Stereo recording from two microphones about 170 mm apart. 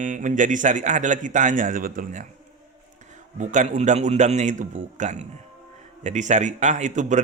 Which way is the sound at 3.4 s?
45° right (ahead or behind).